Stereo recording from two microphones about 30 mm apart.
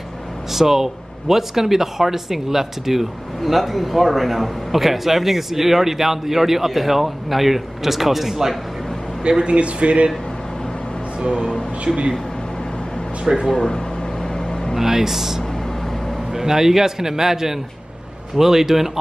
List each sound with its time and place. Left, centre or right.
0.5 s speech: centre
9.4 s speech: right
13.3 s speech: right
14.8 s speech: centre